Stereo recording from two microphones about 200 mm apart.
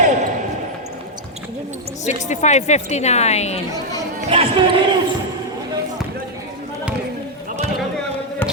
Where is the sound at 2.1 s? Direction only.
35° left (ahead or behind).